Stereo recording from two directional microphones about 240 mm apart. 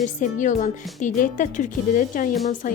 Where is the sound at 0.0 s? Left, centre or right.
Left.